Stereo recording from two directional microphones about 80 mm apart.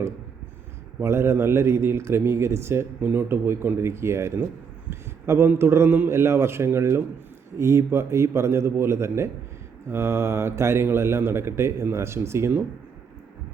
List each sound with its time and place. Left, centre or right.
1.0 s a man's voice: right
4.9 s a sound: right
5.5 s a man's voice: right